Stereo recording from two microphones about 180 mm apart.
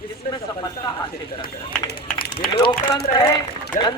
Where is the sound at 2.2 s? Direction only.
55° left (ahead or behind).